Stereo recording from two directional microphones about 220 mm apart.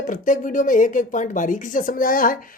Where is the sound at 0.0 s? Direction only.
35° left (ahead or behind).